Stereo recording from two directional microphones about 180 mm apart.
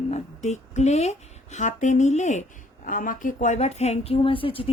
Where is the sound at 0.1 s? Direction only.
40° left (ahead or behind).